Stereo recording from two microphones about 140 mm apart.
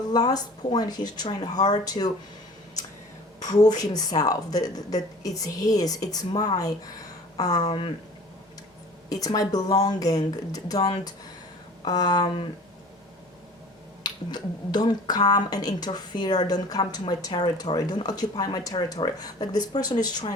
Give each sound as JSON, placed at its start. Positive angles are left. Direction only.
{"t": 0.1, "sound": "speech", "side_deg": 30}
{"t": 3.4, "sound": "speech", "side_deg": 25}
{"t": 9.0, "sound": "speech", "side_deg": 25}
{"t": 14.0, "sound": "speech", "side_deg": 30}